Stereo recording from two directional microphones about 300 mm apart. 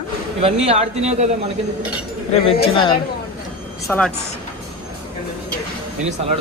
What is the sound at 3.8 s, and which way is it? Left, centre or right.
Speech, centre.